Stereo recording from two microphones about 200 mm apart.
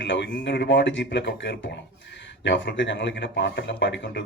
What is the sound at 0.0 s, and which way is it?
A man's voice, 65° left (ahead or behind).